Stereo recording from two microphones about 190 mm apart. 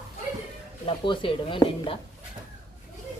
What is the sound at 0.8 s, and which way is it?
A woman's voice, 25° left (ahead or behind).